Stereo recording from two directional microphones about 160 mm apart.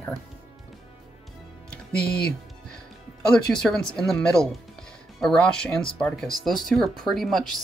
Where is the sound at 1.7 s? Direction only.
5° left (ahead or behind).